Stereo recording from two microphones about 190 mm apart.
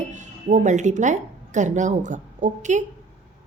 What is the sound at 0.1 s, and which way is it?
A woman's voice, 40° right (ahead or behind).